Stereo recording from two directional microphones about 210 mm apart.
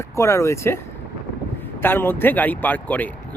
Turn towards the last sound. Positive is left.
turn(degrees=10)  # may be behind; listen again after turning